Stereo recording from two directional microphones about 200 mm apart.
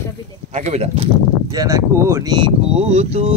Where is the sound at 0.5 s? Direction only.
35° right (ahead or behind).